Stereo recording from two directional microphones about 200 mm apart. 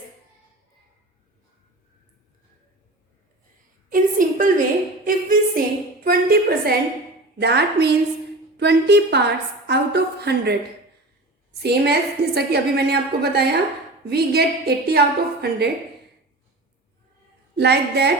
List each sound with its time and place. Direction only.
3.8 s a sound: 40° right (ahead or behind)
5.0 s music: 45° right (ahead or behind)
6.1 s a sound: 50° right (ahead or behind)
7.3 s a woman's voice: 55° right (ahead or behind)
11.6 s a woman's voice: 55° right (ahead or behind)
17.6 s a woman's voice: 55° right (ahead or behind)